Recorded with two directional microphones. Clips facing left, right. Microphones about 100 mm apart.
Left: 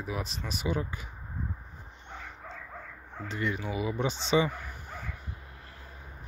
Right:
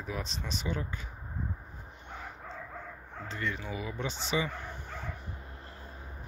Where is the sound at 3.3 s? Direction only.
15° left (ahead or behind).